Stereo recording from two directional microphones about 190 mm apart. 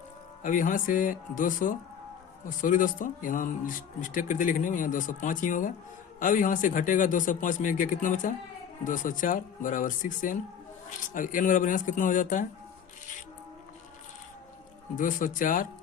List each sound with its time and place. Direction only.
0.4 s speech: 45° left (ahead or behind)
14.9 s speech: 45° left (ahead or behind)